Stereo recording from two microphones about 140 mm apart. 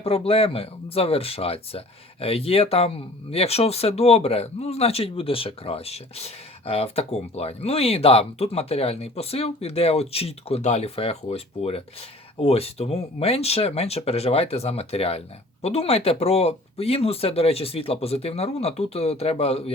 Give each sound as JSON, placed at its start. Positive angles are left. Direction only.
{"t": 0.0, "sound": "speech", "side_deg": 45}